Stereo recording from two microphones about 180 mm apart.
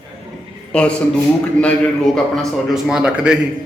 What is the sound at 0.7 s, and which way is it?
A man's voice, 5° left (ahead or behind).